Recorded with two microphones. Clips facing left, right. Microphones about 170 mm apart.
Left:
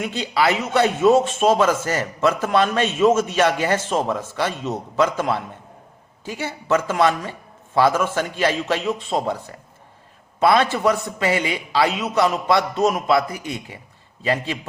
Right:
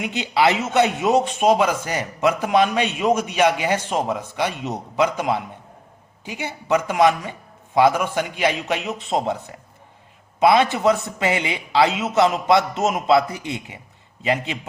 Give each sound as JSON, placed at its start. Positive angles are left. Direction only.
{"t": 0.0, "sound": "a man's voice", "side_deg": -20}
{"t": 10.4, "sound": "a man's voice", "side_deg": -20}